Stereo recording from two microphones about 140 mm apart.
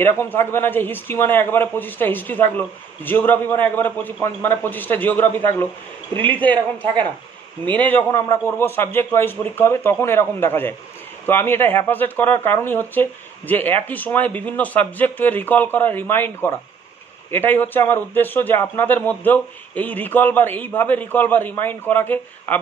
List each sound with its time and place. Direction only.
0.0 s speech: 15° left (ahead or behind)
7.7 s speech: 10° left (ahead or behind)